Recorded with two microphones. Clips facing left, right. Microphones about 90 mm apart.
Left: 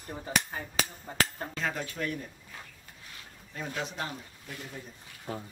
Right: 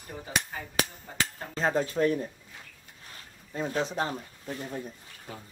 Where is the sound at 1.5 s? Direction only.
35° right (ahead or behind).